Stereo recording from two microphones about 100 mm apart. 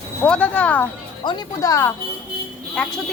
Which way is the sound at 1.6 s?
35° left (ahead or behind).